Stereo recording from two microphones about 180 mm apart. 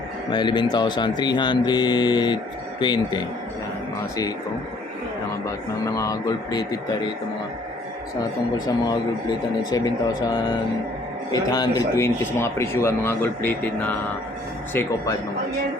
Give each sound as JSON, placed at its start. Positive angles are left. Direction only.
{"t": 0.3, "sound": "speech", "side_deg": 25}
{"t": 5.8, "sound": "speech", "side_deg": 20}
{"t": 8.5, "sound": "speech", "side_deg": 20}
{"t": 11.3, "sound": "speech", "side_deg": 20}